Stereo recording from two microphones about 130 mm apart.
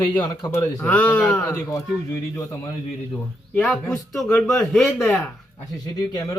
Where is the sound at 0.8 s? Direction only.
10° left (ahead or behind); by 2.7 s 25° left (ahead or behind).